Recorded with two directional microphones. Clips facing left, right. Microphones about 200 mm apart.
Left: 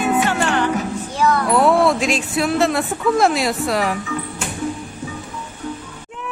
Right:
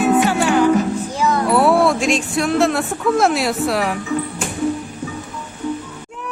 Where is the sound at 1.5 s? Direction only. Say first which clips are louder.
Right 2 dB; 5° right (ahead or behind).